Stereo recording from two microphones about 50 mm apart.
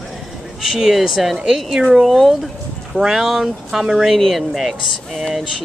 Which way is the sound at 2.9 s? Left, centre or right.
Centre.